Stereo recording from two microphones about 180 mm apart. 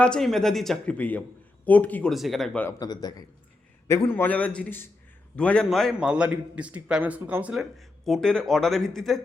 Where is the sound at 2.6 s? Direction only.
20° left (ahead or behind).